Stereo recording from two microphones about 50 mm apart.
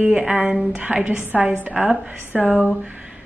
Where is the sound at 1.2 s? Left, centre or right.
Right.